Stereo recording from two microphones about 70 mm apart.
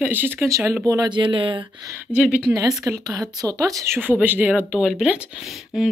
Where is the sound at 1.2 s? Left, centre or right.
Right.